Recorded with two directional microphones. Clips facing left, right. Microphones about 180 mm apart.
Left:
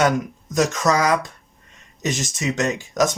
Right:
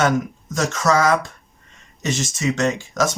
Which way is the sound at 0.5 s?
15° left (ahead or behind).